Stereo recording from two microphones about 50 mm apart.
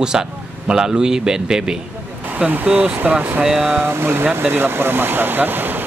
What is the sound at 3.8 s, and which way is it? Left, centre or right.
Speech, right.